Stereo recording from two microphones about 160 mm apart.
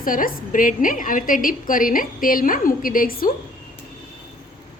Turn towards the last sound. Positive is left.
turn(degrees=65)  # may be behind; listen again after turning